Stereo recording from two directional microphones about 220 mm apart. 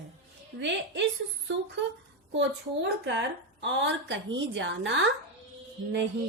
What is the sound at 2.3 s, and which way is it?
A woman's voice, 55° right (ahead or behind).